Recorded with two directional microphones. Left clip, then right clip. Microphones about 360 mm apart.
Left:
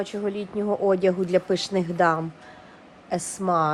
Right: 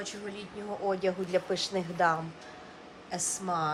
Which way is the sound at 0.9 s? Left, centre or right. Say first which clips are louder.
Left 7 dB; left.